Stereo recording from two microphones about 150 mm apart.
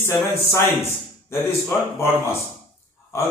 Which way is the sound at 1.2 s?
20° left (ahead or behind).